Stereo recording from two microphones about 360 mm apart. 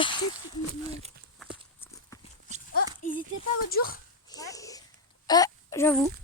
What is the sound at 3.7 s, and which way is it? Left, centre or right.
Speech, left.